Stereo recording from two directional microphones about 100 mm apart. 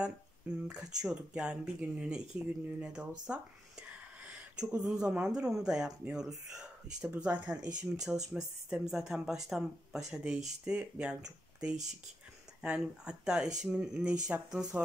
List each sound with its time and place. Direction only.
0.7 s speech: 10° right (ahead or behind)
3.3 s speech: 20° right (ahead or behind)